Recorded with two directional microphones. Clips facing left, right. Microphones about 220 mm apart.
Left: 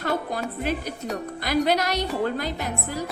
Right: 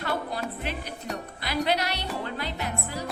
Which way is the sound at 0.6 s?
45° left (ahead or behind).